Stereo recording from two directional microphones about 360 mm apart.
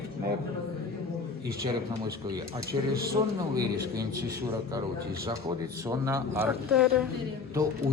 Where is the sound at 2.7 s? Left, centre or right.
Right.